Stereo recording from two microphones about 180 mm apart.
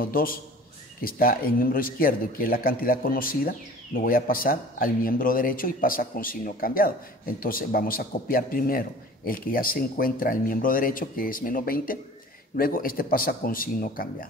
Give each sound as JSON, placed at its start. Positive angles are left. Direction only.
{"t": 0.0, "sound": "a man's voice", "side_deg": 55}